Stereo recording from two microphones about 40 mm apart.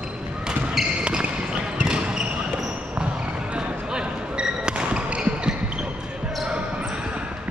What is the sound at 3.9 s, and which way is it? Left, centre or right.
Basketball bounce, right.